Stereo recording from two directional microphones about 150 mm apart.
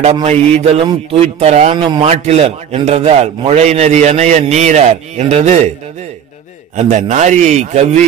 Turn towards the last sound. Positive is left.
turn(degrees=-50)  # may be behind; listen again after turning